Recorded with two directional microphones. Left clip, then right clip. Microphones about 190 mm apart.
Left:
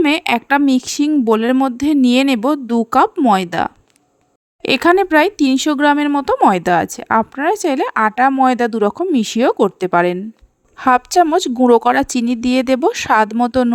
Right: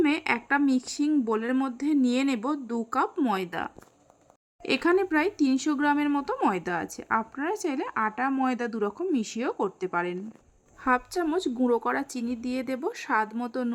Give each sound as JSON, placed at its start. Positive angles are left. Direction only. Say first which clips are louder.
{"t": 0.0, "sound": "a woman's voice", "louder": "left 10 dB", "side_deg": 40}